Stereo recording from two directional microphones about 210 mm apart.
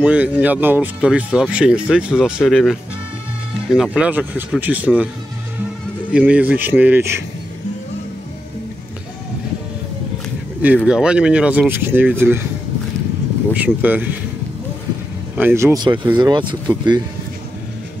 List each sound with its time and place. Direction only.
0.0 s speech: 5° right (ahead or behind)
6.1 s speech: 5° right (ahead or behind)
10.9 s speech: 5° right (ahead or behind)
13.5 s speech: 5° right (ahead or behind)
15.3 s speech: 10° right (ahead or behind)